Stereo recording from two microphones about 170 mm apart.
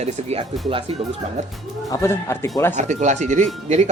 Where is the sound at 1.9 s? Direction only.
15° left (ahead or behind).